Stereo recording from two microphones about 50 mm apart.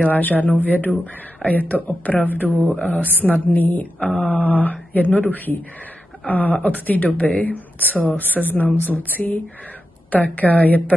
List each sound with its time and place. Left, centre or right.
0.1 s a woman's voice: left